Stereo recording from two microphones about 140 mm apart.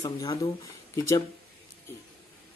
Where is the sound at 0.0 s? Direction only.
30° left (ahead or behind).